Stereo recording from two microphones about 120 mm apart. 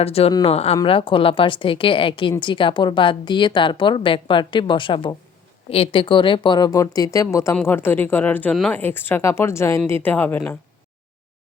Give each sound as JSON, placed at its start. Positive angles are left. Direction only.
{"t": 0.0, "sound": "a woman's voice", "side_deg": 55}
{"t": 0.9, "sound": "a woman's voice", "side_deg": 45}